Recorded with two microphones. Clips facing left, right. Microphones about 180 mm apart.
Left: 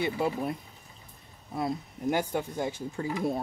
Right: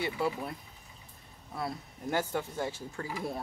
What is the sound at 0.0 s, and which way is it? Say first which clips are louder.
Speech: left 4 dB; 20° left (ahead or behind).